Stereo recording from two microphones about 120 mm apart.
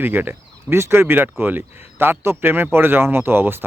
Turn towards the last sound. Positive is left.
turn(degrees=-20)  # may be behind; listen again after turning